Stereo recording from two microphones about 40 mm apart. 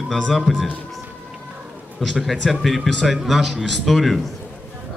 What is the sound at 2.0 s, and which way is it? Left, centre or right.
A man's voice, centre.